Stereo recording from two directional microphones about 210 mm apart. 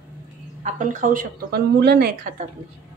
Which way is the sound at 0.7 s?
40° right (ahead or behind).